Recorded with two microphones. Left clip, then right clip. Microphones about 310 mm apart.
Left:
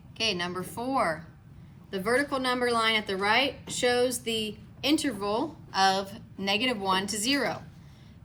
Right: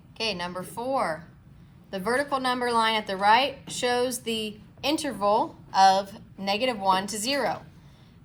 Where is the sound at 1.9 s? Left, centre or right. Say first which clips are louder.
Right 1 dB; centre.